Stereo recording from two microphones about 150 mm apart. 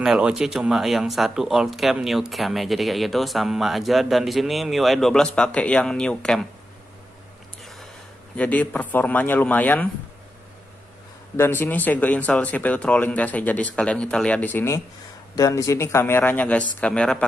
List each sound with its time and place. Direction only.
0.0 s speech: 5° right (ahead or behind)
8.4 s speech: 10° left (ahead or behind)
11.3 s speech: 15° left (ahead or behind)